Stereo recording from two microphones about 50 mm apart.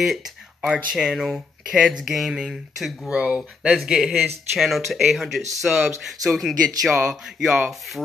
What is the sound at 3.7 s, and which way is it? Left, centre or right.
Speech, centre.